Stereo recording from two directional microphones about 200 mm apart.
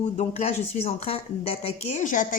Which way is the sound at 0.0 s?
35° left (ahead or behind).